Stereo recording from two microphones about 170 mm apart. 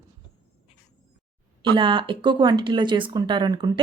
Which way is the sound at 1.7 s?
30° right (ahead or behind).